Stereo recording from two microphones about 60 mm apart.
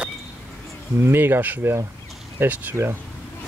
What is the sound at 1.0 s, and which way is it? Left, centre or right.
Speech, right.